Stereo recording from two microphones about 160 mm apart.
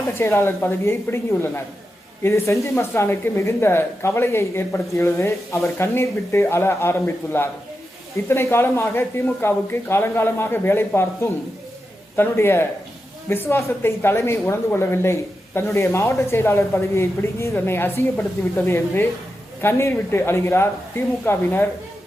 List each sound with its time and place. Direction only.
0.1 s speech: 15° left (ahead or behind)